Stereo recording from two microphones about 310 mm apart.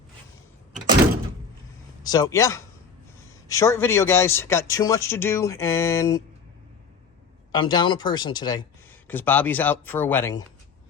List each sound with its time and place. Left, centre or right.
2.0 s speech: centre
7.5 s speech: centre